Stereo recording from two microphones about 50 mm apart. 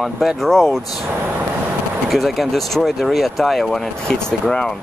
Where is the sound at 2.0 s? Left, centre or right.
Centre.